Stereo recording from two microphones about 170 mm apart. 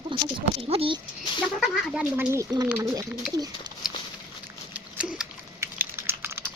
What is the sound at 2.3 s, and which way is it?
Speech, 20° right (ahead or behind).